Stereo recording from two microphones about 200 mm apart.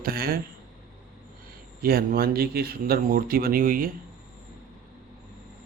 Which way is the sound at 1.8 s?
50° right (ahead or behind).